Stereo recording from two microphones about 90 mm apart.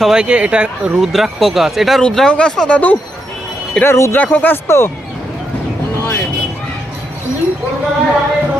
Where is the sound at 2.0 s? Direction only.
10° left (ahead or behind).